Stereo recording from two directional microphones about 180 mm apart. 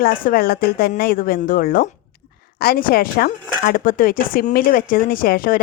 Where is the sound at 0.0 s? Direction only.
55° left (ahead or behind).